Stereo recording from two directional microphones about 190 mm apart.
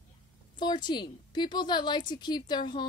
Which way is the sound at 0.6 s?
25° left (ahead or behind).